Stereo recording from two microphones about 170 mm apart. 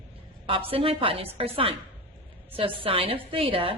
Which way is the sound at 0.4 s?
30° right (ahead or behind).